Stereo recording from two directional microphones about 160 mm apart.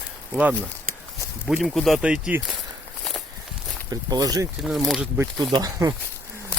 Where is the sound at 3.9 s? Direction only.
25° right (ahead or behind).